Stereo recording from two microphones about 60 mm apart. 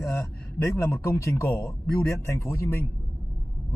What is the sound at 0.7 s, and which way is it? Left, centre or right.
A man's voice, left.